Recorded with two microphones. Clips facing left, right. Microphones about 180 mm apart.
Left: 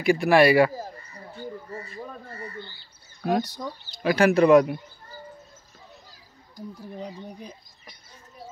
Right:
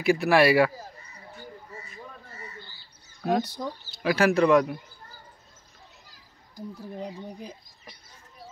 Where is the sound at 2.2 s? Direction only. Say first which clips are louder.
Left 6 dB; 55° left (ahead or behind).